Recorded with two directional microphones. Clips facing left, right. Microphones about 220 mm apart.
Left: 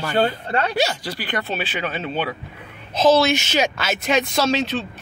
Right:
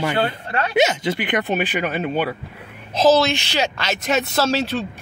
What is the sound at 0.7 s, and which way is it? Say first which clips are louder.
Speech: right 5 dB; 20° right (ahead or behind).